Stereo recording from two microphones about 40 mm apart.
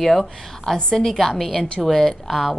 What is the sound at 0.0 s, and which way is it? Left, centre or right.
A woman's voice, centre.